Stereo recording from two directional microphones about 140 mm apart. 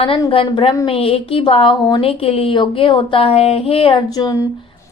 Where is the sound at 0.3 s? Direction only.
40° left (ahead or behind).